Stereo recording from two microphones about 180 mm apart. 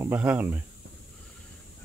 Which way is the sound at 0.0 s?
10° right (ahead or behind).